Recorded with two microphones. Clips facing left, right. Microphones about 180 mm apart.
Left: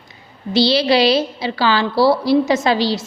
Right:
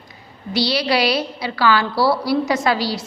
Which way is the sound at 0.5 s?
25° left (ahead or behind).